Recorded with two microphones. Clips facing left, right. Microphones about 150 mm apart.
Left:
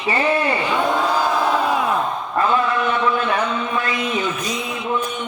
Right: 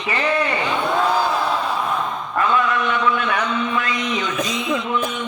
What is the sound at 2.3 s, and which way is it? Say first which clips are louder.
A man's voice: left 1 dB; 30° left (ahead or behind).